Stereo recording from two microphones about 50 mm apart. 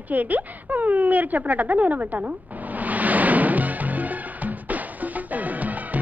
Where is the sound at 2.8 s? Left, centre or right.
Right.